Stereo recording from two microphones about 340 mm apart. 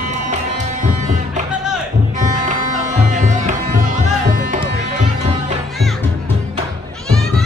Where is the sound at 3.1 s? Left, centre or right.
Right.